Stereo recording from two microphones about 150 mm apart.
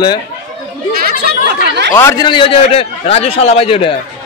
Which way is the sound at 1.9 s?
15° left (ahead or behind).